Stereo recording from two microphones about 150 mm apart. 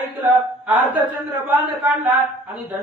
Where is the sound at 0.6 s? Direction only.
10° right (ahead or behind).